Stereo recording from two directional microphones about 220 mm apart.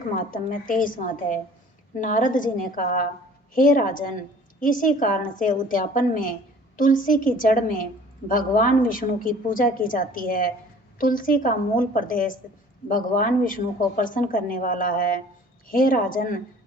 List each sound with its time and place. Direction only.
0.3 s a woman's voice: 40° left (ahead or behind)